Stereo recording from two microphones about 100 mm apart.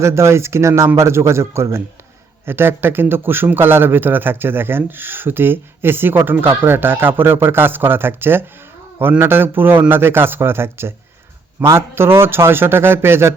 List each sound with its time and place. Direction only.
0.0 s a man's voice: 30° right (ahead or behind)